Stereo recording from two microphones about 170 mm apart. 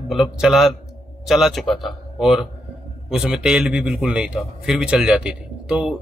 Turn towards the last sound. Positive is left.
turn(degrees=-5)  # may be behind; listen again after turning